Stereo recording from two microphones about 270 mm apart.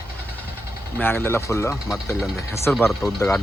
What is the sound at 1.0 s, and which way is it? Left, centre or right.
Speech, centre.